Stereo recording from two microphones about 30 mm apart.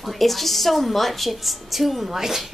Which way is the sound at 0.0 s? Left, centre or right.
Centre.